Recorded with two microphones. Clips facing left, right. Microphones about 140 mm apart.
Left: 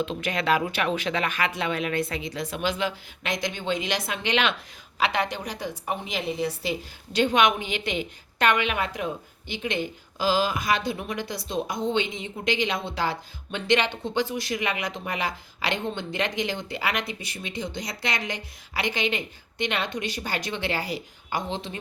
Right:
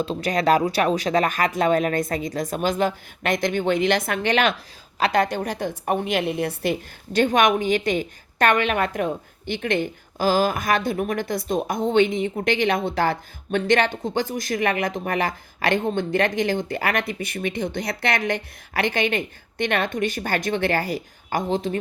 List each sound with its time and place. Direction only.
0.0 s a woman's voice: 35° right (ahead or behind)